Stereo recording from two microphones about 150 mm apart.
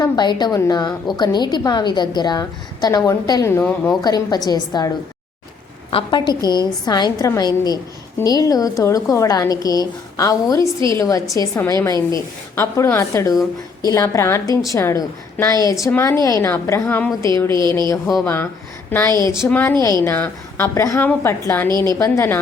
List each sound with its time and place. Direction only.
0.0 s a woman's voice: 30° left (ahead or behind)
3.6 s a woman's voice: 10° left (ahead or behind)
4.0 s a woman's voice: 25° left (ahead or behind)
5.9 s a woman's voice: 35° left (ahead or behind)
17.6 s a sound: 30° right (ahead or behind)
18.9 s a woman's voice: 15° left (ahead or behind)
21.7 s a sound: 30° right (ahead or behind)
22.0 s a woman's voice: 20° left (ahead or behind)